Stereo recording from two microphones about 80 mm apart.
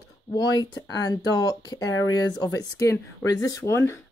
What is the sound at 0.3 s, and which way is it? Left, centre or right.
Speech, left.